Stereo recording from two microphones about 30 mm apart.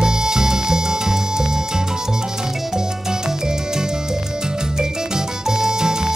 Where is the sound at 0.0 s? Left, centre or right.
Right.